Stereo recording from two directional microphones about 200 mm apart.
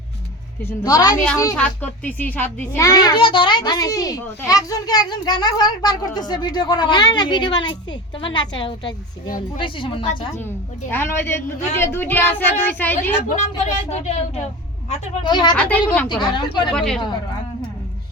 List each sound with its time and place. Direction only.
0.6 s a woman's voice: 20° left (ahead or behind)
1.5 s a child's voice: 5° left (ahead or behind); by 10.1 s 25° left (ahead or behind)
10.9 s a woman's voice: 10° left (ahead or behind)
13.2 s speech: 35° left (ahead or behind)
14.8 s a child's voice: 20° left (ahead or behind)
15.5 s a woman's voice: 5° left (ahead or behind)
16.0 s a child's voice: 20° left (ahead or behind)
16.7 s speech: 5° left (ahead or behind)